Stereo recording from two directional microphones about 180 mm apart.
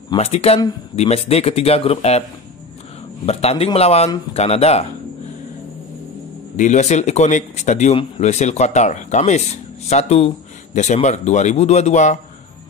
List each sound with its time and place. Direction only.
0.1 s speech: 35° left (ahead or behind)
3.3 s speech: 35° left (ahead or behind)
6.5 s speech: 40° left (ahead or behind)